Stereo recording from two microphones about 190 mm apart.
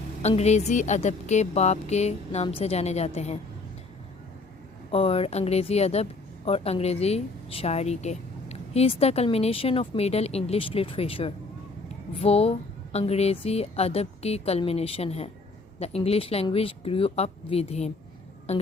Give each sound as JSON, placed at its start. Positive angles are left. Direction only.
{"t": 0.2, "sound": "a woman's voice", "side_deg": 35}
{"t": 4.9, "sound": "a woman's voice", "side_deg": 30}